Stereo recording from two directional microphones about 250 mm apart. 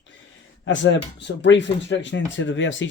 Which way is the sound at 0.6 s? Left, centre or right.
Left.